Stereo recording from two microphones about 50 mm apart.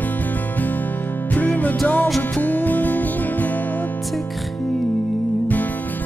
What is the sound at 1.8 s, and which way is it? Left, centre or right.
Music, centre.